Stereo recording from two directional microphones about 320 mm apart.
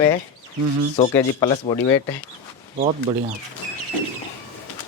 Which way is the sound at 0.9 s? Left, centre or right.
Centre.